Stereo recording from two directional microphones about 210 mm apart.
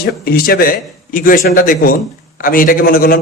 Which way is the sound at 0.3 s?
45° left (ahead or behind).